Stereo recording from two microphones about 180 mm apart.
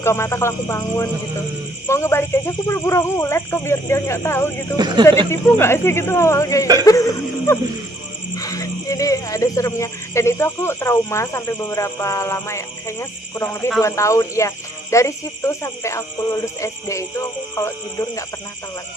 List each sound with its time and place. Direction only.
0.0 s speech: 15° left (ahead or behind)